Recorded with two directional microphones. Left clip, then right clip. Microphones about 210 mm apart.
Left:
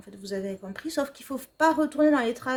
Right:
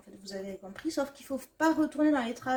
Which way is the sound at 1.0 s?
55° left (ahead or behind).